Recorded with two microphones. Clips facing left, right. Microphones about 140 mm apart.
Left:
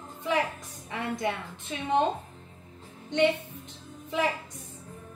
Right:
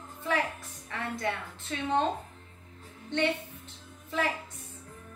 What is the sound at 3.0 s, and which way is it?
Speech, 15° left (ahead or behind).